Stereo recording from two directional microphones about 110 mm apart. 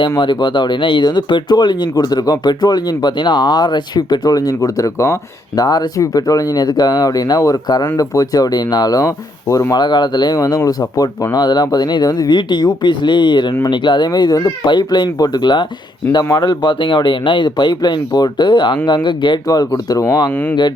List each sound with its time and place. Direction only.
0.2 s a man's voice: 45° left (ahead or behind)
19.5 s speech: 35° left (ahead or behind)
20.3 s speech: 15° left (ahead or behind)